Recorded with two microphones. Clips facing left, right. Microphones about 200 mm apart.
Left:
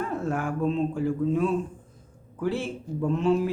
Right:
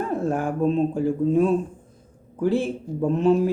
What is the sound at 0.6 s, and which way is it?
Speech, 40° right (ahead or behind).